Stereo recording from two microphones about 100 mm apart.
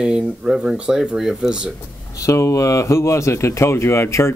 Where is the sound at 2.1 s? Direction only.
30° left (ahead or behind).